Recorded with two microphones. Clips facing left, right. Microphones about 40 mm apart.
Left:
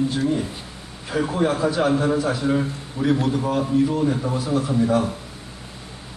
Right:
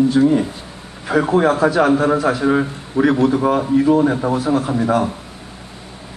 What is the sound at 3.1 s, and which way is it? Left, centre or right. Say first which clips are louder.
A man's voice: right 3 dB; right.